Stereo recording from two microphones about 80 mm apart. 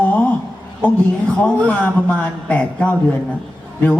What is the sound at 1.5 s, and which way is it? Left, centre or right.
A man's voice, centre.